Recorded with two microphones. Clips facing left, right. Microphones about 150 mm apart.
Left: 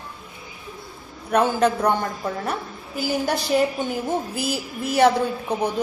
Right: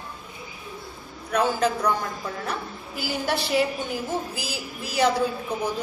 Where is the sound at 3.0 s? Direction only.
50° left (ahead or behind).